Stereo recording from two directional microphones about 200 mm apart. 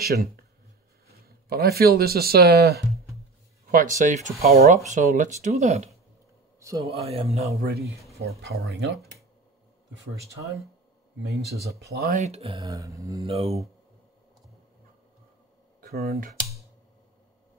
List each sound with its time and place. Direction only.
1.0 s speech: 50° right (ahead or behind); by 5.9 s 35° right (ahead or behind)
6.6 s a man's voice: 15° right (ahead or behind)
6.9 s speech: 30° right (ahead or behind)
8.4 s speech: 55° right (ahead or behind)
11.8 s speech: 50° right (ahead or behind)
12.2 s speech: 30° right (ahead or behind)
12.6 s mantra: 15° right (ahead or behind)
13.2 s speech: 30° right (ahead or behind)
15.8 s speech: 50° right (ahead or behind)